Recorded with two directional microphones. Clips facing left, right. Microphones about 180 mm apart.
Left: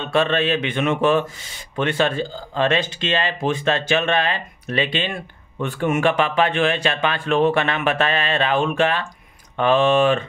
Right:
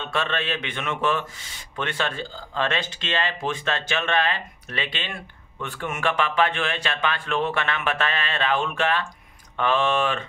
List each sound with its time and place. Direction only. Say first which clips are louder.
0.0 s speech: left 8 dB; 15° left (ahead or behind)